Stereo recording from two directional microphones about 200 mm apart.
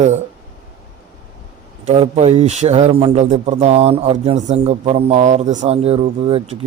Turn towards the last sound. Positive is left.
turn(degrees=-30)  # may be behind; listen again after turning